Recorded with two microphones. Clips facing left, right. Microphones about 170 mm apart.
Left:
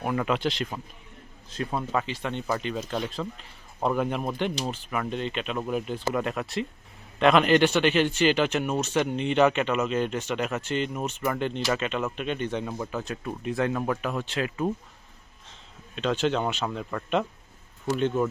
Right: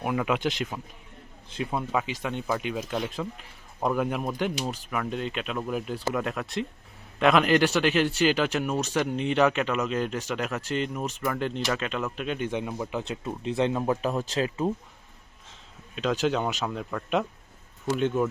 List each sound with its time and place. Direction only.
0.0 s speech: 5° right (ahead or behind); by 14.5 s 35° right (ahead or behind)
16.2 s speech: centre (ahead or behind)